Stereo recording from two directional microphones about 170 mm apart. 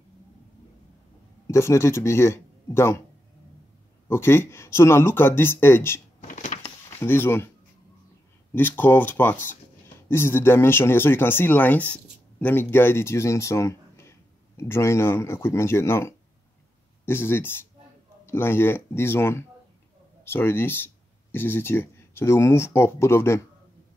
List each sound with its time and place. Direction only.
1.5 s speech: 15° left (ahead or behind)
4.1 s speech: 15° left (ahead or behind)
6.2 s a sound: 45° left (ahead or behind)
7.0 s speech: 15° left (ahead or behind)
8.5 s speech: 10° left (ahead or behind)